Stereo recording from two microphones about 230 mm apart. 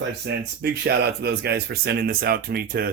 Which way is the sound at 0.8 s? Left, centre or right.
Right.